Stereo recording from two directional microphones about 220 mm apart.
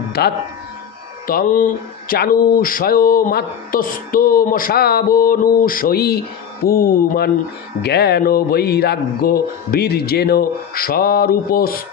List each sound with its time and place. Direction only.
0.2 s speech: 45° left (ahead or behind)
1.2 s a sound: 40° left (ahead or behind)
7.8 s speech: 45° left (ahead or behind)